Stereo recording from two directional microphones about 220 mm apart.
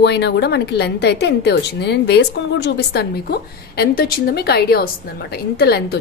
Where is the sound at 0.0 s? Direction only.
50° left (ahead or behind).